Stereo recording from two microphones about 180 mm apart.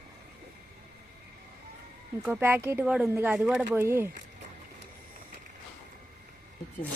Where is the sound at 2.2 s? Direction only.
10° right (ahead or behind).